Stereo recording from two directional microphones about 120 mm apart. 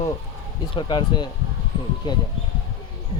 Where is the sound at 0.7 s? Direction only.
40° left (ahead or behind).